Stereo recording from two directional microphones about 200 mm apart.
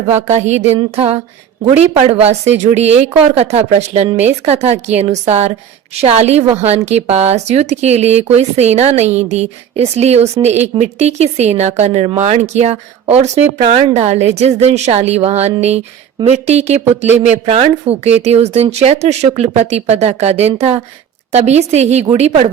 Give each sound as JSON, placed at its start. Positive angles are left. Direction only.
{"t": 0.2, "sound": "a woman's voice", "side_deg": -35}